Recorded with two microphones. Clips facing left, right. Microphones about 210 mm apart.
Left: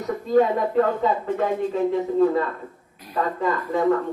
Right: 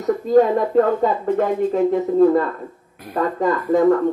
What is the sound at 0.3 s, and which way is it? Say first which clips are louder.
Speech: right 4 dB; 45° right (ahead or behind).